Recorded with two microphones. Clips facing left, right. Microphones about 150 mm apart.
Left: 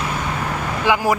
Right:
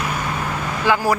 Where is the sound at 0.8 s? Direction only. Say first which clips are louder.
Even; 15° left (ahead or behind).